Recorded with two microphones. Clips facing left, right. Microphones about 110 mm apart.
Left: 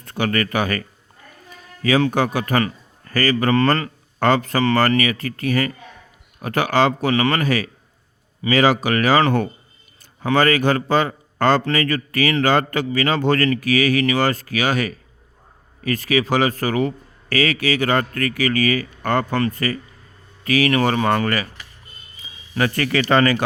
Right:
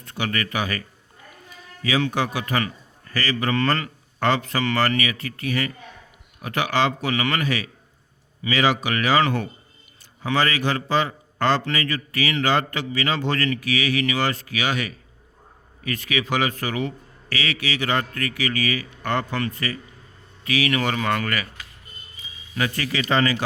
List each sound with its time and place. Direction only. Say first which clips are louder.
0.0 s speech: left 6 dB; 45° left (ahead or behind)
1.8 s a man's voice: left 5 dB; 45° left (ahead or behind)
22.5 s speech: left 6 dB; 50° left (ahead or behind)